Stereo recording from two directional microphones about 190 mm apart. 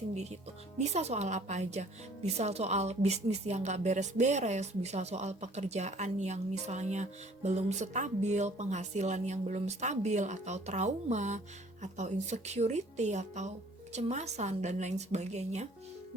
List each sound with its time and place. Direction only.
0.1 s a woman's voice: 35° right (ahead or behind)